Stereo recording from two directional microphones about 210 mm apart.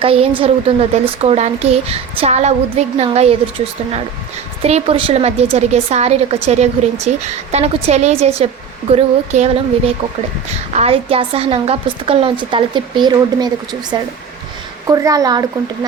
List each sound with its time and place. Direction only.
0.0 s speech: 25° right (ahead or behind)
4.6 s a woman's voice: 30° right (ahead or behind)